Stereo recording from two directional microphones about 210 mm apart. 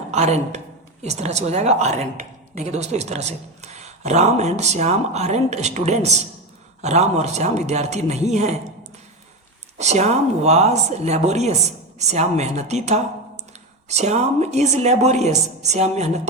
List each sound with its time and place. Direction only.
0.1 s a woman's voice: 30° right (ahead or behind)
9.7 s a woman's voice: 30° right (ahead or behind)